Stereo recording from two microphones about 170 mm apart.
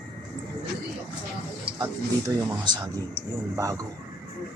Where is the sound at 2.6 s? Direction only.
25° right (ahead or behind).